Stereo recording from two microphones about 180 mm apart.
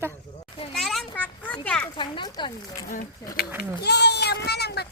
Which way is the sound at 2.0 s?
25° left (ahead or behind).